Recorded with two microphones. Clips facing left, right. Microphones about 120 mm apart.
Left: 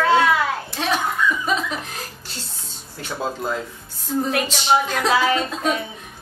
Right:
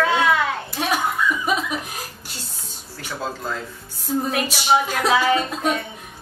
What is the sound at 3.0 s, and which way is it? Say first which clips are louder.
Speech: left 3 dB; 20° left (ahead or behind).